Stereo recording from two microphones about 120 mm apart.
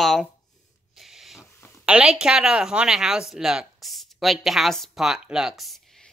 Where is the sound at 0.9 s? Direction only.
Centre (ahead or behind).